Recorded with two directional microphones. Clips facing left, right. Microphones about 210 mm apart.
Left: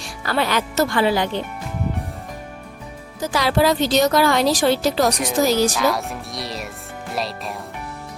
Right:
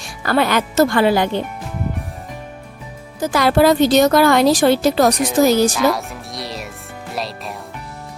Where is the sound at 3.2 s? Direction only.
50° right (ahead or behind).